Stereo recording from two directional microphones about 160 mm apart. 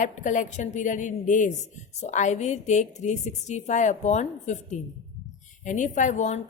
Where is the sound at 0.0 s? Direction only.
55° left (ahead or behind).